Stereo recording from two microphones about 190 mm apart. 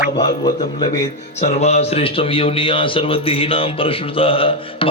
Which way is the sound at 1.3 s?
35° left (ahead or behind).